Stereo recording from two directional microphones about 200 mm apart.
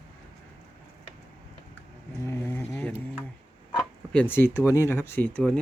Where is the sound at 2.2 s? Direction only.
10° left (ahead or behind).